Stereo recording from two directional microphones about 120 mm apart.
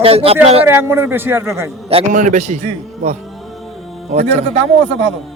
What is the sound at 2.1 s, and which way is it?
Speech, 90° right.